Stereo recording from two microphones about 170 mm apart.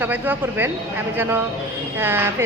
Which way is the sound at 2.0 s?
15° right (ahead or behind).